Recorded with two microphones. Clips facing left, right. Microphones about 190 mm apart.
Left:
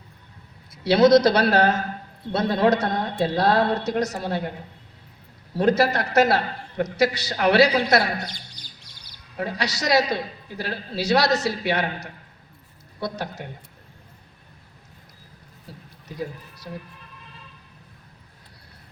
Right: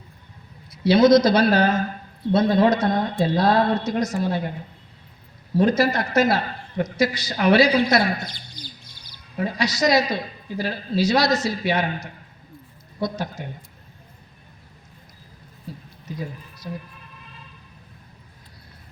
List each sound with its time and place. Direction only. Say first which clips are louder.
0.7 s a man's voice: right 1 dB; 65° left (ahead or behind)
5.5 s a man's voice: right 1 dB; 65° left (ahead or behind)
9.4 s a man's voice: right 5 dB; 65° left (ahead or behind)